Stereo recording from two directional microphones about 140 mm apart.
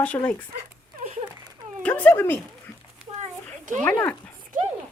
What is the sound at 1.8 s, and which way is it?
Speech, 10° left (ahead or behind).